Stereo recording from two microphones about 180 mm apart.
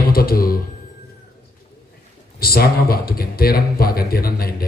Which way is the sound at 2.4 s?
55° left (ahead or behind).